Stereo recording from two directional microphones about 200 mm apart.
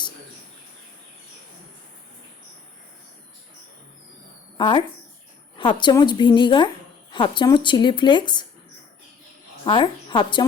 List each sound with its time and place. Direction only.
4.5 s speech: 25° left (ahead or behind)
5.8 s a woman's voice: 20° left (ahead or behind)
9.6 s a woman's voice: 25° left (ahead or behind)